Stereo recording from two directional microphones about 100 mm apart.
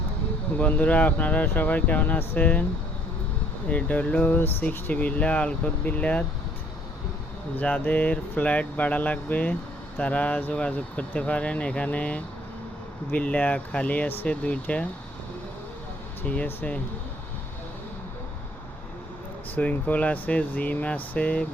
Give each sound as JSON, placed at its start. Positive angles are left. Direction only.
{"t": 0.6, "sound": "speech", "side_deg": 15}
{"t": 3.7, "sound": "speech", "side_deg": 15}
{"t": 7.5, "sound": "speech", "side_deg": 15}
{"t": 16.2, "sound": "speech", "side_deg": 15}
{"t": 19.5, "sound": "speech", "side_deg": 15}